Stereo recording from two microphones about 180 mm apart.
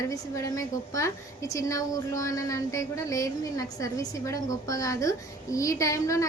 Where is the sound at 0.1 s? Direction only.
15° left (ahead or behind).